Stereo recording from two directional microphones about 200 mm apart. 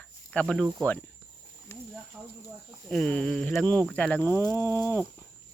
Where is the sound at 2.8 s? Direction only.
5° left (ahead or behind).